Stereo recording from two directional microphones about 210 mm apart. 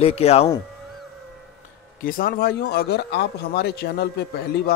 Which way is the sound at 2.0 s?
40° left (ahead or behind).